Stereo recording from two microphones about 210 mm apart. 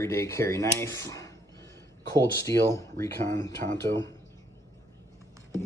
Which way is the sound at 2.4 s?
15° left (ahead or behind).